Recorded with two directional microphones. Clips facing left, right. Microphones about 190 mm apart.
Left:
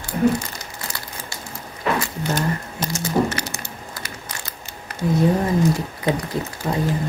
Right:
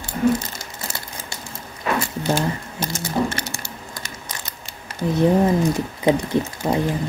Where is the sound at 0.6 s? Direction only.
25° right (ahead or behind).